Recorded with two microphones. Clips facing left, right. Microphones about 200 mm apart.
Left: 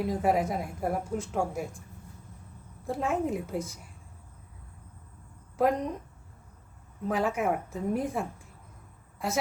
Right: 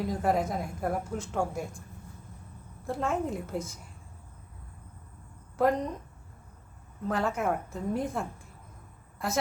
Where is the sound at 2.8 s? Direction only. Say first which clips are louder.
Left 1 dB; 5° left (ahead or behind).